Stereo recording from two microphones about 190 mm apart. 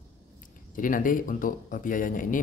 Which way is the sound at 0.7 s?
45° left (ahead or behind).